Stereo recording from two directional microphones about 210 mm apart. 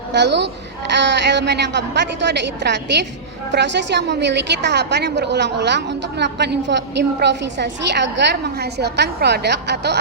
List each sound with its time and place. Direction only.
0.1 s a woman's voice: 55° right (ahead or behind)